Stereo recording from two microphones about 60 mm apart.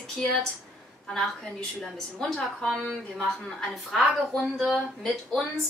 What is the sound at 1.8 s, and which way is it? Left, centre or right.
A woman's voice, centre.